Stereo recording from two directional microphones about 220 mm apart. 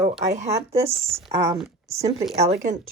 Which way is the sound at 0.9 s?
25° right (ahead or behind).